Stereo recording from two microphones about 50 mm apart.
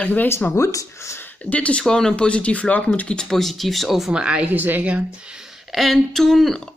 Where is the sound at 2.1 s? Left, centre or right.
Left.